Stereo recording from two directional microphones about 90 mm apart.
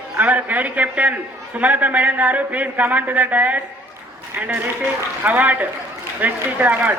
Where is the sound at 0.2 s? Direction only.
15° right (ahead or behind).